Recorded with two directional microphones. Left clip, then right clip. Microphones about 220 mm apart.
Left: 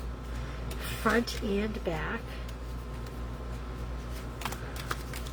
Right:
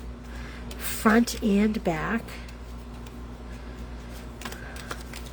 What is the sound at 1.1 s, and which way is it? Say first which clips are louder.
A woman's voice: right 6 dB; 50° right (ahead or behind).